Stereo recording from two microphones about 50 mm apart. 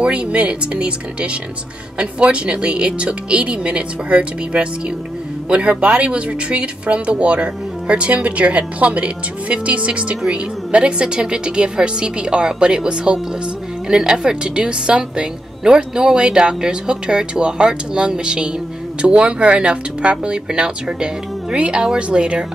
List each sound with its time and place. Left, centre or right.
0.0 s a woman's voice: right